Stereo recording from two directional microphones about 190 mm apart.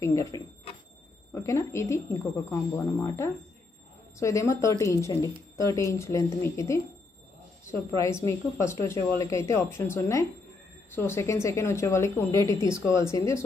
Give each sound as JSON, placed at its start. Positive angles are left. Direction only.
{"t": 0.0, "sound": "speech", "side_deg": 15}